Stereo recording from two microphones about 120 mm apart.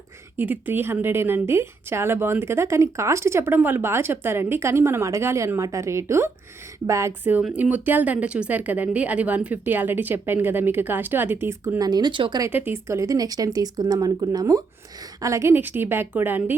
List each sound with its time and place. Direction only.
0.3 s a woman's voice: 15° right (ahead or behind)
7.5 s speech: 15° right (ahead or behind)
11.8 s speech: 35° right (ahead or behind)
12.5 s speech: 15° right (ahead or behind)